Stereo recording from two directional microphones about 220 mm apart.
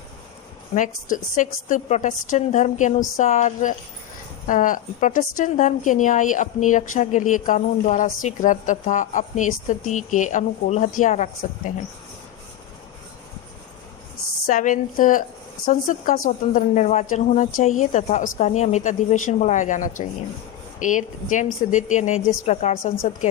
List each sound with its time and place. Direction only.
0.7 s a woman's voice: 35° left (ahead or behind)
14.4 s a woman's voice: 35° left (ahead or behind)